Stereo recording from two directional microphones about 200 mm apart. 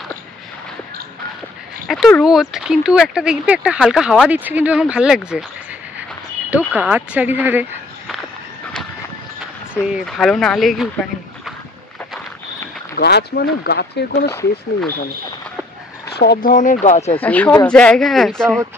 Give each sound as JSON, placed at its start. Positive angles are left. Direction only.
{"t": 1.9, "sound": "speech", "side_deg": 0}
{"t": 6.5, "sound": "speech", "side_deg": -5}
{"t": 9.8, "sound": "speech", "side_deg": -5}
{"t": 12.9, "sound": "speech", "side_deg": 55}
{"t": 16.2, "sound": "speech", "side_deg": 50}
{"t": 17.2, "sound": "speech", "side_deg": 10}